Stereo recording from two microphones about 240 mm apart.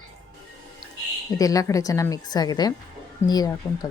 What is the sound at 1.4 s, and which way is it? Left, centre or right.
A woman's voice, centre.